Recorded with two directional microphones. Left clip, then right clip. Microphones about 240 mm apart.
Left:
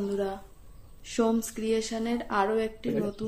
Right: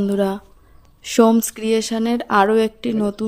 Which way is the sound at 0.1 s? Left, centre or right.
Right.